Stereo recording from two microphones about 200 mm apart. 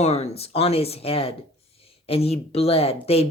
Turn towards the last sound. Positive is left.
turn(degrees=30)  # may be behind; listen again after turning